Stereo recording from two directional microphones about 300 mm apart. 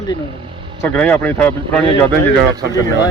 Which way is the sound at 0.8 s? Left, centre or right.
Centre.